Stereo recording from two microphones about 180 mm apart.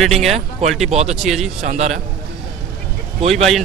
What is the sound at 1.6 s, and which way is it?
Speech, 40° right (ahead or behind).